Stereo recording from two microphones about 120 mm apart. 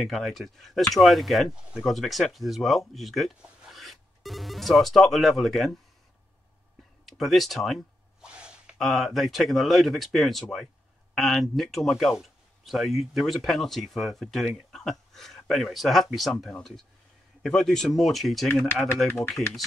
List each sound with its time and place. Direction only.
0.0 s speech: centre (ahead or behind)
7.1 s a sound: centre (ahead or behind)
8.3 s gasp: 10° right (ahead or behind)
8.7 s speech: centre (ahead or behind)
19.0 s speech: 20° left (ahead or behind)